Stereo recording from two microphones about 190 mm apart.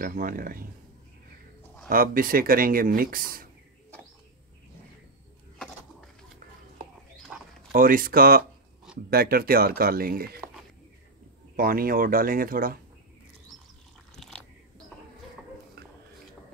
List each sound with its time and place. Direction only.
0.0 s speech: 45° right (ahead or behind)
1.9 s speech: 50° right (ahead or behind)
7.7 s speech: 45° right (ahead or behind)
11.5 s speech: 50° right (ahead or behind)
14.1 s biting: centre (ahead or behind)